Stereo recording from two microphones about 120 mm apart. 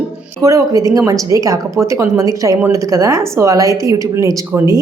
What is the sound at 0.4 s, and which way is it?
A woman's voice, 25° right (ahead or behind).